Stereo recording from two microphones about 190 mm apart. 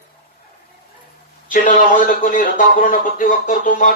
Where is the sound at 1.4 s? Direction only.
45° left (ahead or behind).